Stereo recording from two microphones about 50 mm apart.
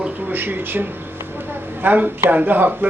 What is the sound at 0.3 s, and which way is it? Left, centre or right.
Speech, right.